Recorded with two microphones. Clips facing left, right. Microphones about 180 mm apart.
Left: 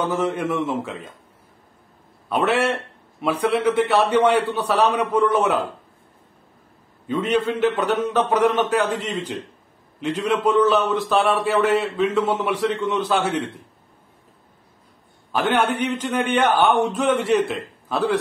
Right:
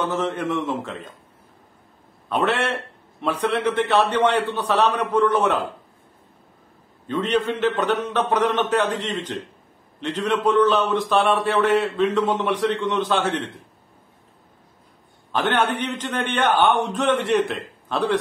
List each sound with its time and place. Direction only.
0.0 s a man's voice: 10° left (ahead or behind)
2.2 s a man's voice: 10° left (ahead or behind)
7.1 s a man's voice: 10° left (ahead or behind)
15.3 s a man's voice: 10° left (ahead or behind)